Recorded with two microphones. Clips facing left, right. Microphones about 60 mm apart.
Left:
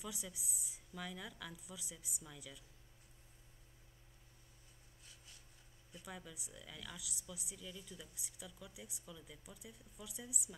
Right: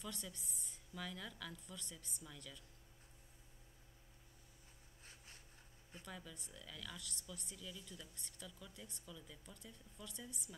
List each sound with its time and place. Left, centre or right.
0.0 s a woman's voice: centre
5.0 s a sound: right
6.0 s a woman's voice: centre